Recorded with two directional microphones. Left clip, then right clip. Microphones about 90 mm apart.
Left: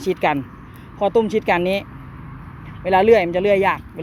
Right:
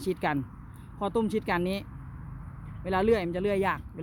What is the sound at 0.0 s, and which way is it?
Speech, 35° right (ahead or behind).